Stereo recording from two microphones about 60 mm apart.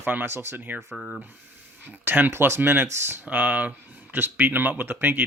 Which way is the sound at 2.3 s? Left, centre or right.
Right.